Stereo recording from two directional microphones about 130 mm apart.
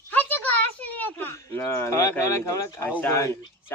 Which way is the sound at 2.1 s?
20° left (ahead or behind).